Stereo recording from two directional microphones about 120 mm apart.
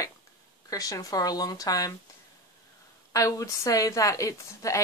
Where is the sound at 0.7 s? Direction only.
30° left (ahead or behind).